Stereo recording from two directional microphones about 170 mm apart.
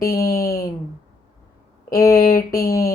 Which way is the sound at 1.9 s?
20° left (ahead or behind).